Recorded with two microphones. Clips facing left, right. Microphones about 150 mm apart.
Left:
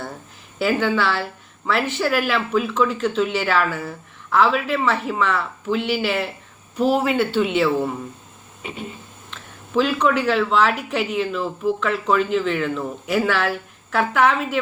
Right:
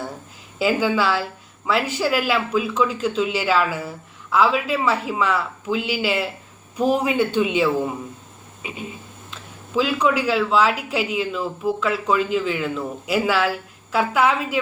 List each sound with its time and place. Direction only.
0.6 s speech: 10° right (ahead or behind)